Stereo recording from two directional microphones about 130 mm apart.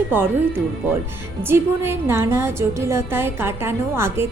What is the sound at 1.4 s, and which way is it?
A woman's voice, 20° right (ahead or behind).